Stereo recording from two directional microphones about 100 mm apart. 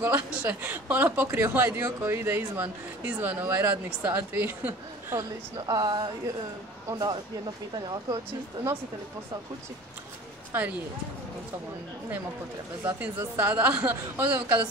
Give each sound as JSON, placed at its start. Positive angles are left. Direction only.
{"t": 0.0, "sound": "a woman's voice", "side_deg": -15}
{"t": 5.7, "sound": "speech", "side_deg": -40}
{"t": 10.5, "sound": "speech", "side_deg": -15}
{"t": 13.0, "sound": "a woman's voice", "side_deg": -20}